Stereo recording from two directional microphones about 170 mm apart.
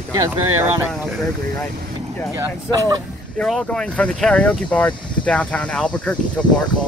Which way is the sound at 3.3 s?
5° left (ahead or behind).